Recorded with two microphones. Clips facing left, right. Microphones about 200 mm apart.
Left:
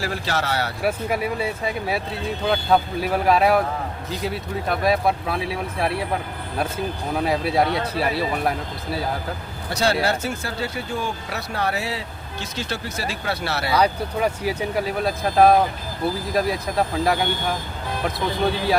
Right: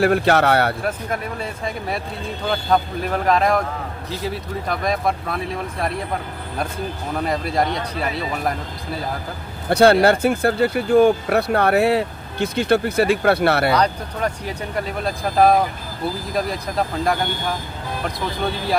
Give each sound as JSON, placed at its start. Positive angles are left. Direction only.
{"t": 0.0, "sound": "speech", "side_deg": -60}
{"t": 0.8, "sound": "speech", "side_deg": 10}
{"t": 7.2, "sound": "speech", "side_deg": 5}
{"t": 9.6, "sound": "speech", "side_deg": -55}
{"t": 13.7, "sound": "speech", "side_deg": 5}